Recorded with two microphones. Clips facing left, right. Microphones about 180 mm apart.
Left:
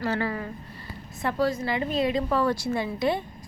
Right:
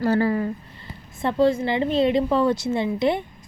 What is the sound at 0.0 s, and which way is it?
A woman's voice, 30° right (ahead or behind).